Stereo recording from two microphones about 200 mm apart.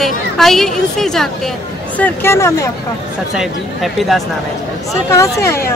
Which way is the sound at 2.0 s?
15° left (ahead or behind).